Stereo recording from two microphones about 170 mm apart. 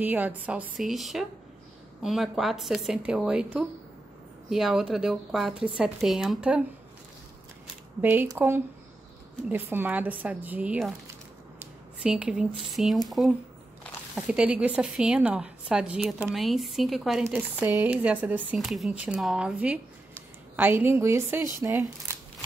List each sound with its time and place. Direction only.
0.0 s a woman's voice: 10° right (ahead or behind)
8.0 s speech: 10° right (ahead or behind)
12.0 s a woman's voice: 5° right (ahead or behind)